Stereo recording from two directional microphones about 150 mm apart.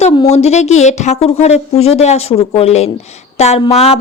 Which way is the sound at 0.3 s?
45° left (ahead or behind).